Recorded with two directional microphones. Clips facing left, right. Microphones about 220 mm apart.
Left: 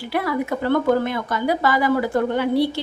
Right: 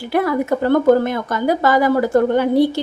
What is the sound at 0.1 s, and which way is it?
A woman's voice, 45° right (ahead or behind).